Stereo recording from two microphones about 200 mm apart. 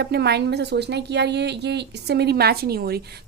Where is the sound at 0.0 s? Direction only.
55° right (ahead or behind).